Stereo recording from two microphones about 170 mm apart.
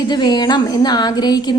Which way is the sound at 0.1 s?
25° left (ahead or behind).